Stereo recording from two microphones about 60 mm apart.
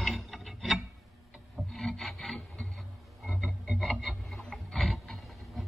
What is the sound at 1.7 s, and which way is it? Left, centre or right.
Rub, centre.